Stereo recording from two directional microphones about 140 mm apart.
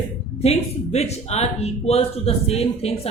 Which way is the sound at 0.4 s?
50° left (ahead or behind).